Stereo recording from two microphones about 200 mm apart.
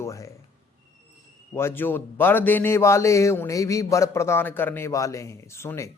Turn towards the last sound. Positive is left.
turn(degrees=15)  # may be behind; listen again after turning